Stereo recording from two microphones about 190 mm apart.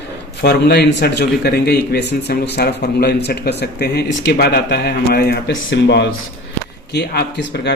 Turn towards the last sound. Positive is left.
turn(degrees=60)  # may be behind; listen again after turning